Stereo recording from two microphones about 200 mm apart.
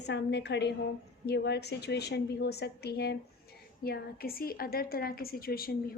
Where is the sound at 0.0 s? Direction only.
60° left (ahead or behind).